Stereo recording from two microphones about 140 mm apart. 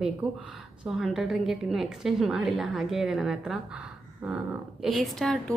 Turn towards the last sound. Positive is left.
turn(degrees=5)  # may be behind; listen again after turning